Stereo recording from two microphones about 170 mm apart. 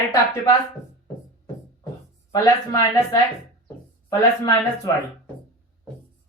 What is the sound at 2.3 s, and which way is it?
Speech, 20° left (ahead or behind).